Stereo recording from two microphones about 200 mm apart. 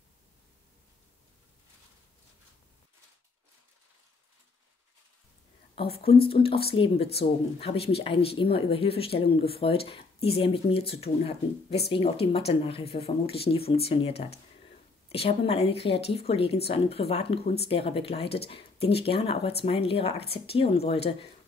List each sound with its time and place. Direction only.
5.8 s speech: 30° left (ahead or behind)